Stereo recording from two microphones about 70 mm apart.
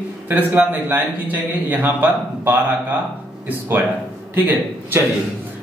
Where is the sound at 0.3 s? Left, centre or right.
Right.